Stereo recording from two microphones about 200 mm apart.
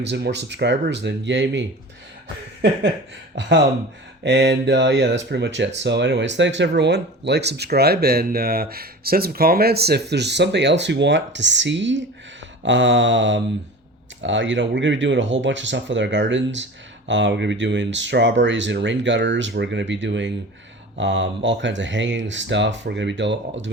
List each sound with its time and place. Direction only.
0.0 s speech: 60° right (ahead or behind)
4.2 s speech: 60° right (ahead or behind)